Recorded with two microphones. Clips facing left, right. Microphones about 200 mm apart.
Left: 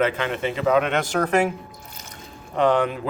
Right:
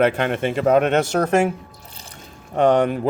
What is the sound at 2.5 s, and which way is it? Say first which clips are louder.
Speech: right 3 dB; 50° right (ahead or behind).